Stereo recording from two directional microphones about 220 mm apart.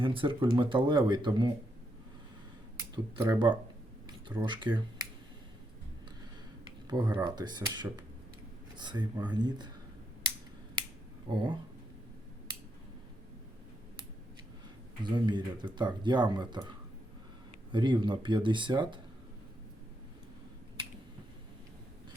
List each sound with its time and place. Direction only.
0.0 s speech: 25° right (ahead or behind)
2.9 s speech: 20° right (ahead or behind)
6.8 s speech: 20° right (ahead or behind)
11.3 s speech: 20° right (ahead or behind)
15.0 s speech: 20° right (ahead or behind)